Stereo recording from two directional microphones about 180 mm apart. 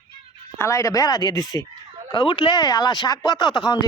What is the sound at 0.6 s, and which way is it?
A man's voice, 15° left (ahead or behind).